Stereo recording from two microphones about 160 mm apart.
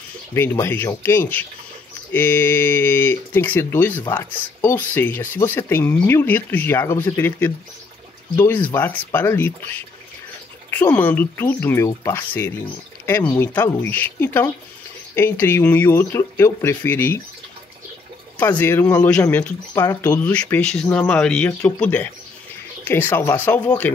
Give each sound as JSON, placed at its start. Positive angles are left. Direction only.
{"t": 0.3, "sound": "speech", "side_deg": 15}
{"t": 18.4, "sound": "speech", "side_deg": 15}
{"t": 19.7, "sound": "speech", "side_deg": 20}
{"t": 20.1, "sound": "speech", "side_deg": 10}